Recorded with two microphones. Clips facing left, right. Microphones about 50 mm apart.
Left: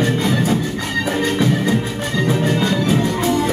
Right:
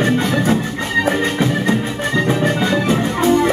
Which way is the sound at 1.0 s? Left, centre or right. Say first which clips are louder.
Right 1 dB; right.